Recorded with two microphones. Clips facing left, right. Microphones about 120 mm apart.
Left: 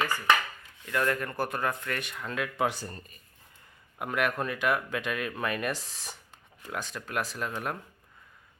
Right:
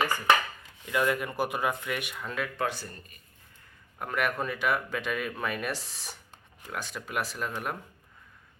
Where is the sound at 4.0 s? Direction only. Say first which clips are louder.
Left 1 dB; centre (ahead or behind).